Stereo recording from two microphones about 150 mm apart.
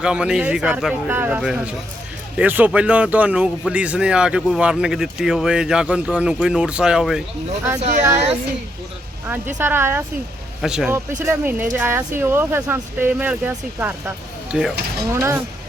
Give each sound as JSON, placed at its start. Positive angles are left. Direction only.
{"t": 0.0, "sound": "speech", "side_deg": -5}
{"t": 7.8, "sound": "speech", "side_deg": -50}
{"t": 9.6, "sound": "speech", "side_deg": -15}
{"t": 15.1, "sound": "speech", "side_deg": -20}